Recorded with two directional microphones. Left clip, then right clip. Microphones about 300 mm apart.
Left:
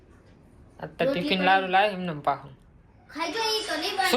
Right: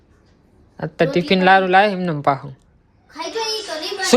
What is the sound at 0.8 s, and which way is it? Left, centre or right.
Speech, right.